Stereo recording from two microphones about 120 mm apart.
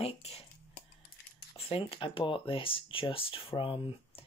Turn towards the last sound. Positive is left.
turn(degrees=50)  # may be behind; listen again after turning